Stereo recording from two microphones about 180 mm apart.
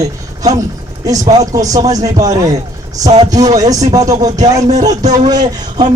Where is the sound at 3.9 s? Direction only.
20° right (ahead or behind).